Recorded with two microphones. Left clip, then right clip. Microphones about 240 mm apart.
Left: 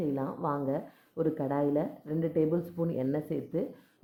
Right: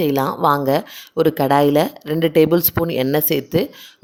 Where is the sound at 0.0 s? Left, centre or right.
Right.